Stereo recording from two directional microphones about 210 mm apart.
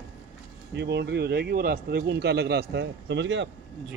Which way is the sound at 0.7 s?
55° right (ahead or behind).